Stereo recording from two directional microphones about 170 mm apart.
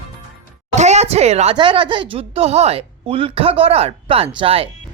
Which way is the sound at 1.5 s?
30° right (ahead or behind).